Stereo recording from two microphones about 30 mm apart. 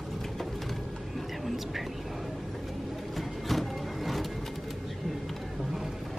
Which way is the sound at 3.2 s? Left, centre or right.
Centre.